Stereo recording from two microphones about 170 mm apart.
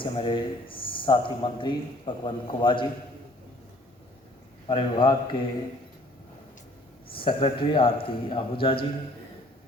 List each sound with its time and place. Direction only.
0.0 s a man's voice: 30° left (ahead or behind)
4.7 s a man's voice: 30° left (ahead or behind)
7.1 s a man's voice: 30° left (ahead or behind)